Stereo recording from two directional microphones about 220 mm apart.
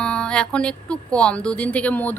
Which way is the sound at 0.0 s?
5° left (ahead or behind).